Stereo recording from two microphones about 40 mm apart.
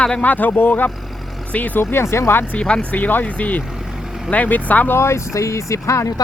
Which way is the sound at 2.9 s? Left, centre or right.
Left.